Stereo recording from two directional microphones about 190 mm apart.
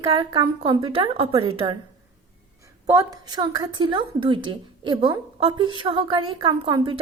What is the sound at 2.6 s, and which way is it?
A woman's voice, 15° right (ahead or behind).